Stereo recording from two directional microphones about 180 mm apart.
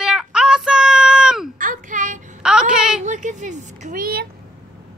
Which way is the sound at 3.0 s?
45° right (ahead or behind).